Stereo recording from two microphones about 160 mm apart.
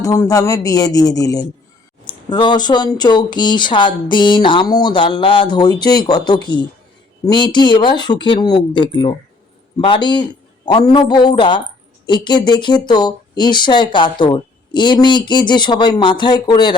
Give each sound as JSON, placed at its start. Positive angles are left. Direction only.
{"t": 0.0, "sound": "speech", "side_deg": 20}